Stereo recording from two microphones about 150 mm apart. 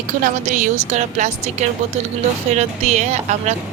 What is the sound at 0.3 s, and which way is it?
Speech, 60° right (ahead or behind).